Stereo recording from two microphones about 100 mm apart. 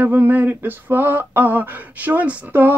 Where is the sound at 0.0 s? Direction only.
20° right (ahead or behind).